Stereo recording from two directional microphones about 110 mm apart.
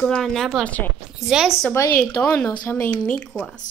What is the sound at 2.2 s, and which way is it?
A woman's voice, 10° left (ahead or behind).